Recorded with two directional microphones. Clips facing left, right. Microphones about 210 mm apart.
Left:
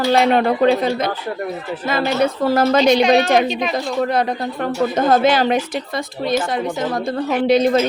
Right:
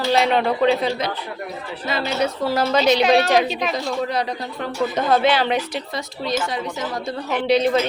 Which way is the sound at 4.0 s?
55° left (ahead or behind).